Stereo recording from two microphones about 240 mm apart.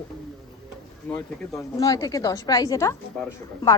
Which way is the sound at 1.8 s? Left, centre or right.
Centre.